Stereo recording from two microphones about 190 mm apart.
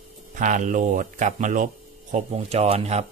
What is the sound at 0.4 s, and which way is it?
Speech, 40° right (ahead or behind).